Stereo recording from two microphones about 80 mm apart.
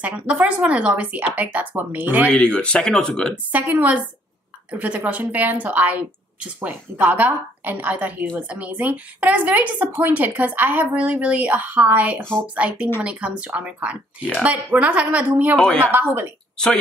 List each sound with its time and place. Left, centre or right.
0.0 s a woman's voice: centre
2.3 s speech: centre
3.5 s a woman's voice: right
15.5 s speech: centre
15.8 s a woman's voice: right